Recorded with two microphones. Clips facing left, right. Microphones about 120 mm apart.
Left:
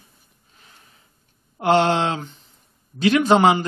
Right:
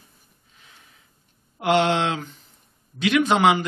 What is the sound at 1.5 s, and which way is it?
A man's voice, 35° left (ahead or behind).